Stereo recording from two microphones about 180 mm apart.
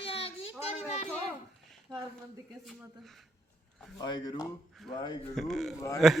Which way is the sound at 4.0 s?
20° left (ahead or behind).